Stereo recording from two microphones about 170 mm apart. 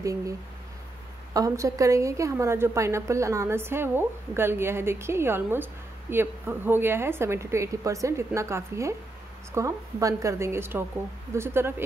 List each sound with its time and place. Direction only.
0.0 s speech: 20° right (ahead or behind)
1.3 s a woman's voice: 20° right (ahead or behind)